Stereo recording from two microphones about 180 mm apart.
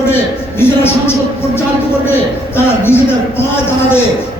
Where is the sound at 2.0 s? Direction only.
10° left (ahead or behind).